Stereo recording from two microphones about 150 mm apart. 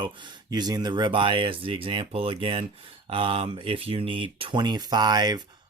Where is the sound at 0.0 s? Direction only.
30° right (ahead or behind).